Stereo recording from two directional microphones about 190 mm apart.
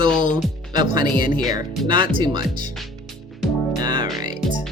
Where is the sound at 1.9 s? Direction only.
25° right (ahead or behind).